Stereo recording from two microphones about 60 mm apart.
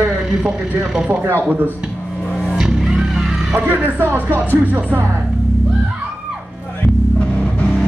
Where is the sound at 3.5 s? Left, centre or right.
Right.